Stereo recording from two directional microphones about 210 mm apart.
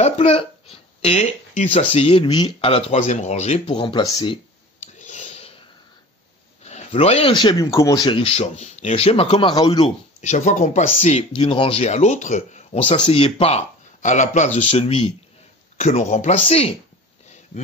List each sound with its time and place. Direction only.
0.0 s speech: 25° left (ahead or behind)
4.9 s whispering: 35° left (ahead or behind)
6.6 s speech: 30° left (ahead or behind)
10.2 s speech: 35° left (ahead or behind)